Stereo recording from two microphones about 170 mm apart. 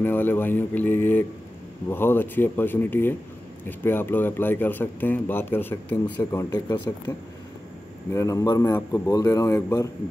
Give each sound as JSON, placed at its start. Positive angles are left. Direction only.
{"t": 0.0, "sound": "a man's voice", "side_deg": 10}
{"t": 8.1, "sound": "a man's voice", "side_deg": 20}